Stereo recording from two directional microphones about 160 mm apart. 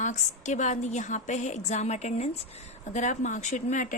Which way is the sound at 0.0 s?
50° left (ahead or behind).